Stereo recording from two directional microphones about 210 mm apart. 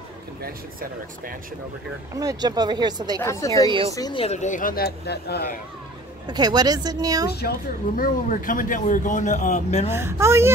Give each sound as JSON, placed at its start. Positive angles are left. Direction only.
{"t": 0.4, "sound": "speech", "side_deg": -45}
{"t": 2.1, "sound": "speech", "side_deg": -20}
{"t": 3.2, "sound": "a woman's voice", "side_deg": 15}
{"t": 6.2, "sound": "speech", "side_deg": -20}
{"t": 7.2, "sound": "a woman's voice", "side_deg": 50}
{"t": 9.8, "sound": "a woman's voice", "side_deg": -10}